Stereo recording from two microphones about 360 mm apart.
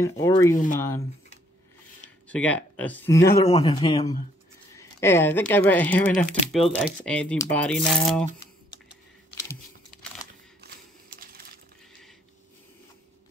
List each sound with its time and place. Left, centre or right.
0.0 s speech: centre
2.2 s speech: centre
3.3 s speech: centre
11.1 s crumpling: right